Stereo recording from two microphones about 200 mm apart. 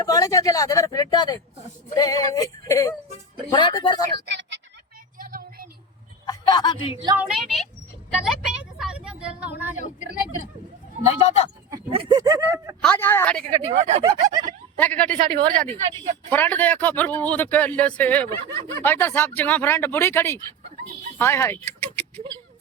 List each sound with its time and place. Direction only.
0.0 s speech: 20° left (ahead or behind)
4.3 s a sound: 60° right (ahead or behind)
5.2 s vehicle: 45° right (ahead or behind)
6.2 s speech: 20° left (ahead or behind)
6.9 s speech: 15° right (ahead or behind)
7.3 s speech: centre (ahead or behind)
11.0 s speech: 30° left (ahead or behind)
11.9 s speech: 25° right (ahead or behind)
12.8 s speech: 10° left (ahead or behind)
13.7 s speech: 30° right (ahead or behind)
14.8 s speech: 5° left (ahead or behind)
21.7 s a sound: 10° left (ahead or behind)